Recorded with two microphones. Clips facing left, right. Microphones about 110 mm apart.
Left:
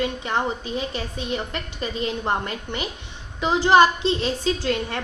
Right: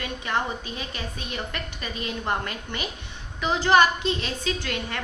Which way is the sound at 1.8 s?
25° left (ahead or behind).